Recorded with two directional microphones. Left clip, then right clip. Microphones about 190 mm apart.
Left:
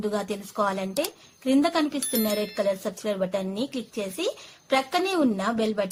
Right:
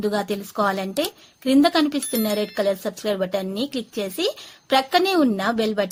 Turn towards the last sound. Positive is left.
turn(degrees=-30)  # may be behind; listen again after turning